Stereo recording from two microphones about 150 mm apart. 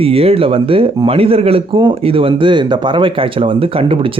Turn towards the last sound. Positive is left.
turn(degrees=-35)  # may be behind; listen again after turning